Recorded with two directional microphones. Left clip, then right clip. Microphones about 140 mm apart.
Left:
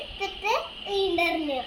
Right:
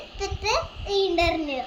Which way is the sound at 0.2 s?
10° right (ahead or behind).